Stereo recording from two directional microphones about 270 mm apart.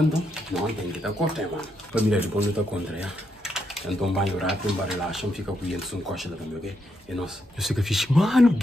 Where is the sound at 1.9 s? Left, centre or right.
Centre.